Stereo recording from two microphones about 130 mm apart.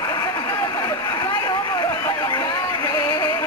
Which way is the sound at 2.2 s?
35° left (ahead or behind).